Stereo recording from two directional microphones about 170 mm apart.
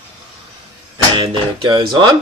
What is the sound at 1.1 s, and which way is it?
Speech, 30° right (ahead or behind).